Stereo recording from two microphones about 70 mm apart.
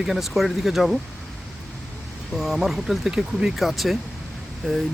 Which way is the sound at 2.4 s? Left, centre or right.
Centre.